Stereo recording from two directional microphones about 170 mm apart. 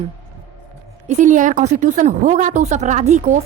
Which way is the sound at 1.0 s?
45° right (ahead or behind).